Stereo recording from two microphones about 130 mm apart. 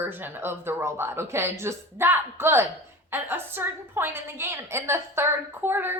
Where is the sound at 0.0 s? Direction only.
15° right (ahead or behind).